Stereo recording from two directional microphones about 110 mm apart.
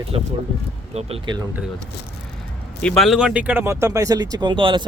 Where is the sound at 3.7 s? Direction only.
25° right (ahead or behind); by 4.9 s 45° right (ahead or behind).